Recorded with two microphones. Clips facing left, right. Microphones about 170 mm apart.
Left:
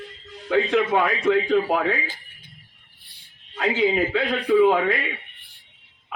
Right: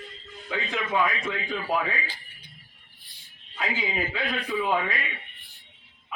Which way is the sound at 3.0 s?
60° left (ahead or behind).